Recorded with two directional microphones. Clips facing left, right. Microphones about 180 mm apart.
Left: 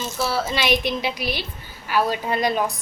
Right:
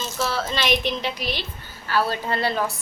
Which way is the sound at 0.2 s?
10° left (ahead or behind).